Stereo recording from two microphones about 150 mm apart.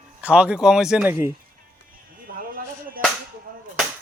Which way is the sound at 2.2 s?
70° right (ahead or behind).